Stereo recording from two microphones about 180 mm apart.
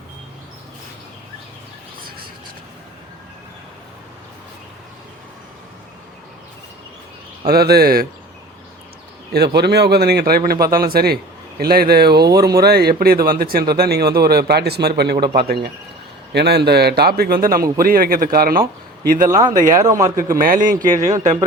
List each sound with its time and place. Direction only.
7.4 s a man's voice: 60° right (ahead or behind)
9.3 s a man's voice: 65° right (ahead or behind)
19.3 s a man's voice: 20° right (ahead or behind)
20.4 s a man's voice: 50° right (ahead or behind)